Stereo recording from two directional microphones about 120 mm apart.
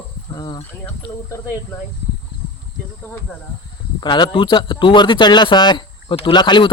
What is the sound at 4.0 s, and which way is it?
A man's voice, 40° left (ahead or behind).